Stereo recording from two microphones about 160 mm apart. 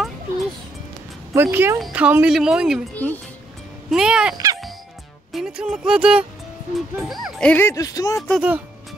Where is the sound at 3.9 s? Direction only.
5° right (ahead or behind).